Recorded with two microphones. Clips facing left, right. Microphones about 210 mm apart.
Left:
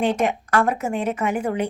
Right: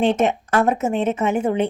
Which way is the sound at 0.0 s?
25° right (ahead or behind).